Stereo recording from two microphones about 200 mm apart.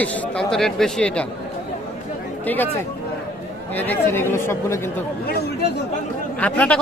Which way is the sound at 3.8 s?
10° left (ahead or behind).